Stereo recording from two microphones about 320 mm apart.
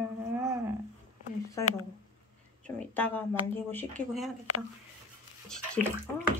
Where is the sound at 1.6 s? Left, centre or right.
Centre.